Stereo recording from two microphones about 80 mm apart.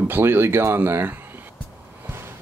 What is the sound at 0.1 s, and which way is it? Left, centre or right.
Speech, right.